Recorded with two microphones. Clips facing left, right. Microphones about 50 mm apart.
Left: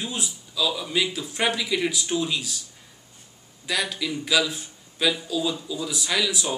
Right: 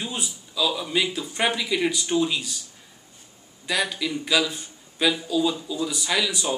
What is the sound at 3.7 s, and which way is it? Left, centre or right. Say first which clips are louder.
A man's voice: right 2 dB; centre.